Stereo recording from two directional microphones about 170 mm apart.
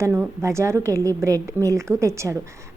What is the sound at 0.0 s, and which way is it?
A woman's voice, 15° right (ahead or behind).